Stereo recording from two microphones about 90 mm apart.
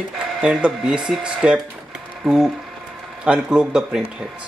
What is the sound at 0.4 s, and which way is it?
Speech, 10° right (ahead or behind).